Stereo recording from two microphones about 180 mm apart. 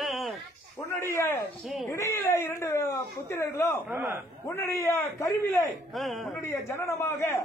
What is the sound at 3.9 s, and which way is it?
Speech, 15° right (ahead or behind).